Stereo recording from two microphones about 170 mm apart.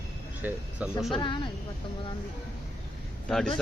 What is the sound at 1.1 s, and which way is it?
Speech, 30° left (ahead or behind).